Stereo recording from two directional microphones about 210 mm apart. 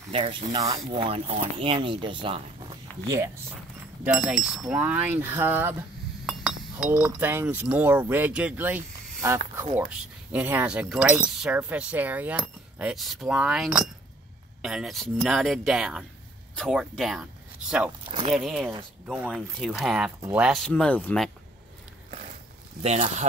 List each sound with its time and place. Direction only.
0.1 s speech: 25° right (ahead or behind)
4.0 s speech: 5° right (ahead or behind)
18.0 s speech: 25° right (ahead or behind)
18.3 s speech: centre (ahead or behind)
22.8 s speech: 30° right (ahead or behind)